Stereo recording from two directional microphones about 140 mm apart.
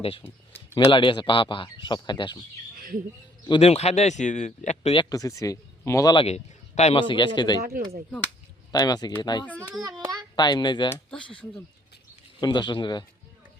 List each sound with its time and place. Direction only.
0.9 s speech: 35° left (ahead or behind)
3.6 s speech: 50° left (ahead or behind)
5.0 s speech: 25° left (ahead or behind)
6.1 s speech: 50° left (ahead or behind); by 7.6 s 30° left (ahead or behind)
8.7 s speech: 30° left (ahead or behind)
9.8 s a sound: 30° right (ahead or behind)
10.3 s speech: 30° left (ahead or behind)
11.1 s speech: 5° left (ahead or behind)
12.4 s speech: 30° left (ahead or behind)